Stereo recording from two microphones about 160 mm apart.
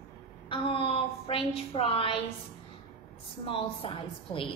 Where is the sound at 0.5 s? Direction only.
35° left (ahead or behind).